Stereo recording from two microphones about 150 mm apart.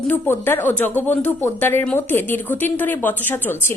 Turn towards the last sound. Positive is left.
turn(degrees=15)  # may be behind; listen again after turning